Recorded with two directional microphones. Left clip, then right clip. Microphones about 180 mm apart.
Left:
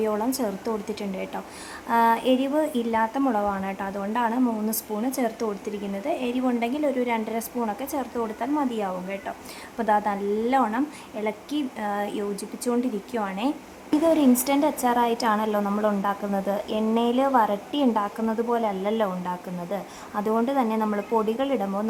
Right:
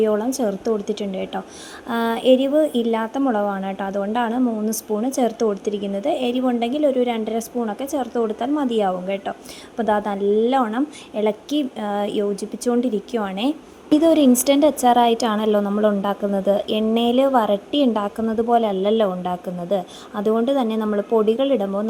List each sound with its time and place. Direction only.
0.0 s a woman's voice: 15° right (ahead or behind)